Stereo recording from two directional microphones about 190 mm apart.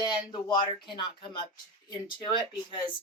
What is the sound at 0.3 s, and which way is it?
Speech, 25° left (ahead or behind).